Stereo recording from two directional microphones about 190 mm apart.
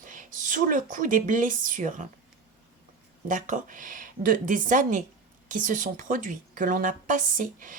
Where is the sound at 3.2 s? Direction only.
45° right (ahead or behind).